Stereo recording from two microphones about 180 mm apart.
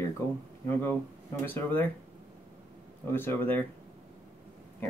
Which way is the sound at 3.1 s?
10° left (ahead or behind).